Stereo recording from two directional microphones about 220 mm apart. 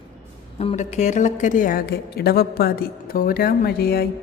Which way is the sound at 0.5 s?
30° left (ahead or behind).